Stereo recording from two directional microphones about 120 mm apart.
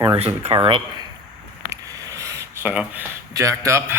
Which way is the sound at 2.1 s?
25° right (ahead or behind).